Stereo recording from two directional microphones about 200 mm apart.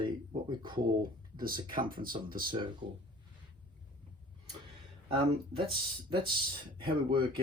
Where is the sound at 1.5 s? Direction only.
25° right (ahead or behind).